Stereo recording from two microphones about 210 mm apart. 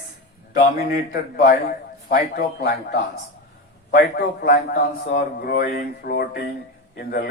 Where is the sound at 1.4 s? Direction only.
40° left (ahead or behind).